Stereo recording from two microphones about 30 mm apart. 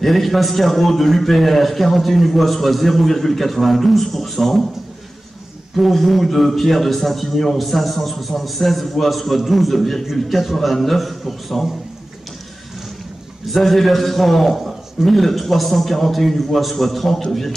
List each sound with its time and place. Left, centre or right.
0.0 s a man's voice: centre
5.8 s a man's voice: centre
13.5 s a man's voice: centre